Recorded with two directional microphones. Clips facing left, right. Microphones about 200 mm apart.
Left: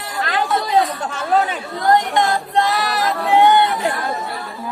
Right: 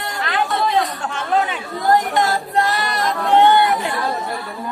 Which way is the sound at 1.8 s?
Centre (ahead or behind).